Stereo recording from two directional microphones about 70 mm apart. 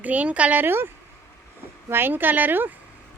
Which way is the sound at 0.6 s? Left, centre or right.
Right.